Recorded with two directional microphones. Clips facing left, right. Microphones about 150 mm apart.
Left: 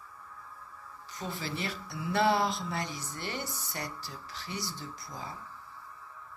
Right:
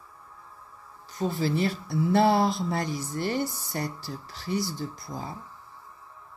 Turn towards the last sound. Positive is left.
turn(degrees=-35)  # may be behind; listen again after turning